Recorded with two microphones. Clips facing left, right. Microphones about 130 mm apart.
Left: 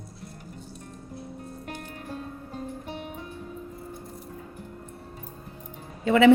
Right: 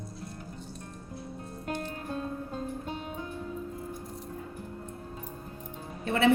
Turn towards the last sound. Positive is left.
turn(degrees=90)